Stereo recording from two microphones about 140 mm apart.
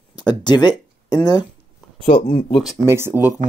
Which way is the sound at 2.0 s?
45° left (ahead or behind).